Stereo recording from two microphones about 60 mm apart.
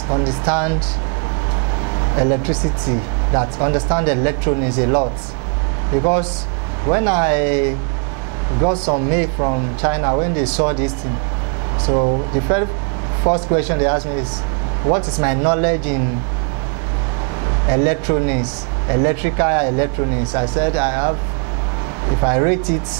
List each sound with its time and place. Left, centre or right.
0.1 s speech: right
2.0 s speech: right
6.9 s speech: right
10.0 s speech: right
10.4 s speech: centre
12.0 s speech: right
15.1 s speech: right
17.6 s speech: right